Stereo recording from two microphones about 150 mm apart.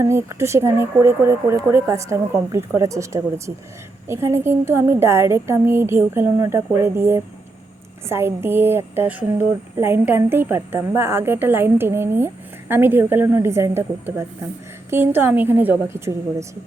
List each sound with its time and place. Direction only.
0.0 s a woman's voice: 20° right (ahead or behind)